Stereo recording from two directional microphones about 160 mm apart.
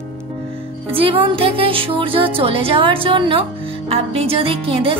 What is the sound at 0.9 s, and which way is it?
Music, 35° right (ahead or behind).